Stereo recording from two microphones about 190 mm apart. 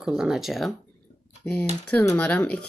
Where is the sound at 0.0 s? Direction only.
5° right (ahead or behind).